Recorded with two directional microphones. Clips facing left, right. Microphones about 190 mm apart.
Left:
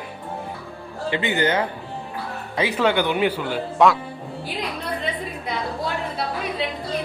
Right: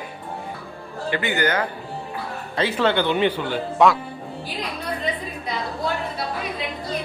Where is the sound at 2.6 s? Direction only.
10° left (ahead or behind).